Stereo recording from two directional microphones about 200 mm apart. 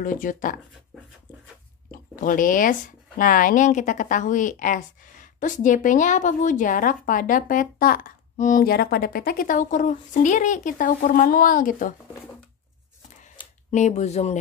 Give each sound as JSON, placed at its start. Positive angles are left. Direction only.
{"t": 0.0, "sound": "speech", "side_deg": 40}
{"t": 1.9, "sound": "speech", "side_deg": 40}
{"t": 13.7, "sound": "speech", "side_deg": 35}